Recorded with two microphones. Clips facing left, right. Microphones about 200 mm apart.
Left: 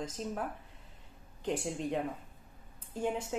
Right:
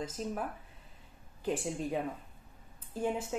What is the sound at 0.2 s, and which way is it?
Speech, 5° right (ahead or behind).